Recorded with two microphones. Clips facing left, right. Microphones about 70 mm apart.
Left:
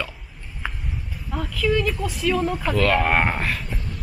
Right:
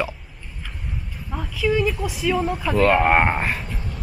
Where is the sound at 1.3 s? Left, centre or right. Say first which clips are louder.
Even; centre.